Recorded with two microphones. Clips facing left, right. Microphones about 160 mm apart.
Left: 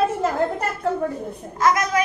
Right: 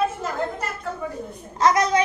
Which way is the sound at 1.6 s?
30° right (ahead or behind).